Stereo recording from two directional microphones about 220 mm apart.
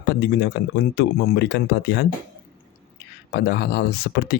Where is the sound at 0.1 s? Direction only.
50° left (ahead or behind).